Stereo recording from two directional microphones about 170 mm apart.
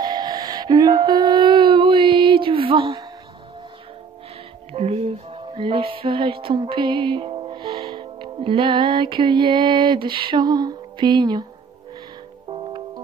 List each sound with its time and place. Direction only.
0.0 s music: 25° right (ahead or behind)
4.7 s music: 35° right (ahead or behind)
12.4 s music: 30° right (ahead or behind)